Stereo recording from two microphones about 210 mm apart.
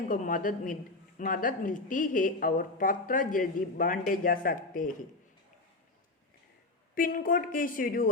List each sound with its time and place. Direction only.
0.1 s a woman's voice: 40° left (ahead or behind)
6.9 s a woman's voice: 40° left (ahead or behind)